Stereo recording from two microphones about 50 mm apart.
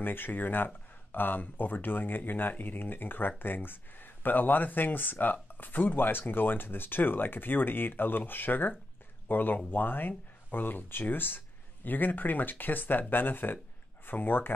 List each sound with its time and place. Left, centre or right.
0.0 s speech: left